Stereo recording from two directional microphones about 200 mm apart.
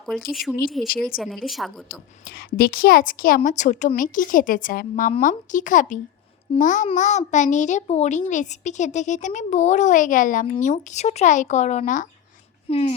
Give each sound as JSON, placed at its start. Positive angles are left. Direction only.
{"t": 0.0, "sound": "a woman's voice", "side_deg": 0}
{"t": 2.2, "sound": "a woman's voice", "side_deg": 50}